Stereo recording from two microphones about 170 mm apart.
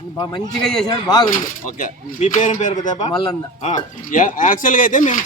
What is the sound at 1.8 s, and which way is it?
Speech, 45° left (ahead or behind).